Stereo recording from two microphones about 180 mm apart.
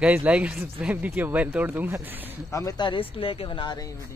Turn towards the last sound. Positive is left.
turn(degrees=25)  # may be behind; listen again after turning